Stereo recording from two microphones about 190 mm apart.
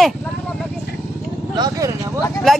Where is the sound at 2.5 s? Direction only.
Centre (ahead or behind).